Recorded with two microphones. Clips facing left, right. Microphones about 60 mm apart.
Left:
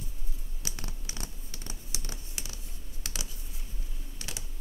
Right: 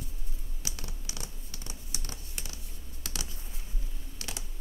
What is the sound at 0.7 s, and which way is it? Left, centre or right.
Typing, left.